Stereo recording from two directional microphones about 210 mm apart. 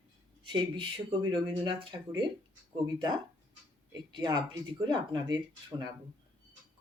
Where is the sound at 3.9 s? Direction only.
20° right (ahead or behind).